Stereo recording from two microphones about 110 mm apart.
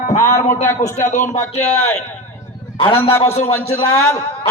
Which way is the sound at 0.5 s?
25° left (ahead or behind).